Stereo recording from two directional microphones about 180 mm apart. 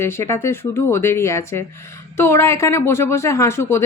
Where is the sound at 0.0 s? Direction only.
15° left (ahead or behind).